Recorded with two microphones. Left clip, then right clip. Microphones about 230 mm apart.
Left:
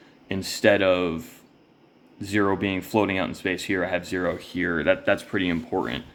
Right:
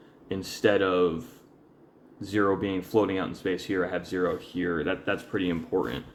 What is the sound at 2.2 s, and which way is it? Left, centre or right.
Speech, left.